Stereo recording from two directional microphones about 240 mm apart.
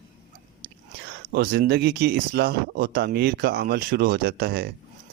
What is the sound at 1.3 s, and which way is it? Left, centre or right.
Speech, right.